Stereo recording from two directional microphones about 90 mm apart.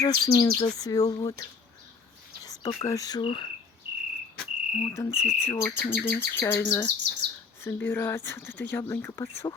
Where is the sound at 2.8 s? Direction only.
40° left (ahead or behind).